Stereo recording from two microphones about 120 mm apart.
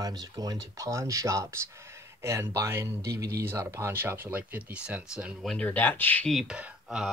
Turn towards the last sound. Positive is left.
turn(degrees=-5)  # may be behind; listen again after turning